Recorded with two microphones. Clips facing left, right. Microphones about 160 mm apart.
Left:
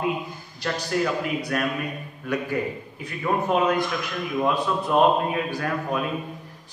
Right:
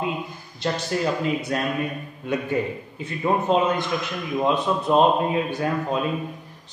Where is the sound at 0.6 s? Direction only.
25° right (ahead or behind).